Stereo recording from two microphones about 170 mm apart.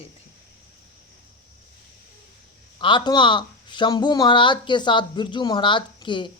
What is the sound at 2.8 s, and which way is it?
Speech, 25° left (ahead or behind).